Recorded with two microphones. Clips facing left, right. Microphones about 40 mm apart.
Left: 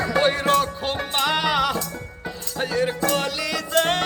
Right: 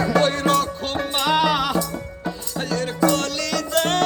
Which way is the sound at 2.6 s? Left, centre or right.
Centre.